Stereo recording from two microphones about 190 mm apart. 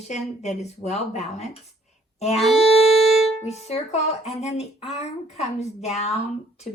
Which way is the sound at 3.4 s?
35° left (ahead or behind).